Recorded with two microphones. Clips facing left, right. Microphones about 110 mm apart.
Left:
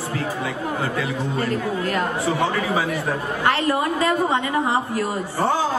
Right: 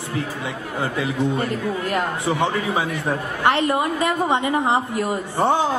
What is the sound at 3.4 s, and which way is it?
A woman's voice, 20° right (ahead or behind).